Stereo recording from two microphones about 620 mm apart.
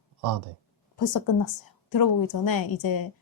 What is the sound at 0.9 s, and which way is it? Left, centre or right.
A woman's voice, left.